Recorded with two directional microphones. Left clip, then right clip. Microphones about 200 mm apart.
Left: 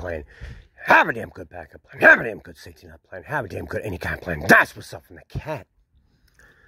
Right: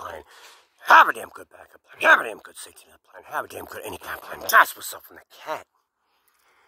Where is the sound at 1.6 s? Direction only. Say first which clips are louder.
Left 5 dB; 5° left (ahead or behind).